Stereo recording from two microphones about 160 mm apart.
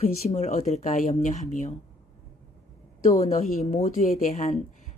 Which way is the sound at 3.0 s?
45° left (ahead or behind).